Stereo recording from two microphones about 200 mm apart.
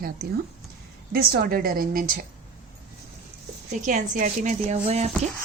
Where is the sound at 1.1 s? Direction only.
50° right (ahead or behind).